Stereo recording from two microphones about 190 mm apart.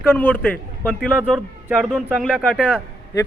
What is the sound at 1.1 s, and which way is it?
Speech, 10° right (ahead or behind).